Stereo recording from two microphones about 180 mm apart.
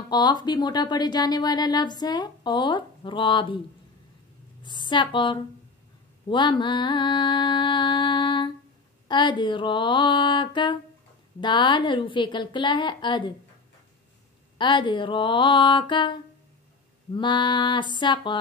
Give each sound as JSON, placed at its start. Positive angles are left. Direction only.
{"t": 0.1, "sound": "speech", "side_deg": 25}
{"t": 4.6, "sound": "speech", "side_deg": 25}
{"t": 6.2, "sound": "mantra", "side_deg": 25}
{"t": 9.0, "sound": "speech", "side_deg": 25}
{"t": 14.6, "sound": "speech", "side_deg": 25}